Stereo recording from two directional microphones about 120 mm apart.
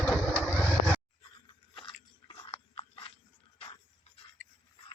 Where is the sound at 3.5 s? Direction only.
45° left (ahead or behind).